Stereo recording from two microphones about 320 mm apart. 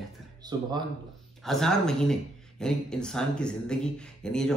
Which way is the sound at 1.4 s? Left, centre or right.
Centre.